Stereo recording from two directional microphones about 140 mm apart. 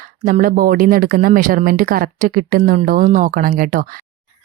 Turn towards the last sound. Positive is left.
turn(degrees=-75)  # may be behind; listen again after turning